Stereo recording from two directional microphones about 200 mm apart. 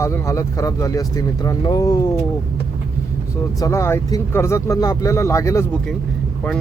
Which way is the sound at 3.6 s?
15° left (ahead or behind).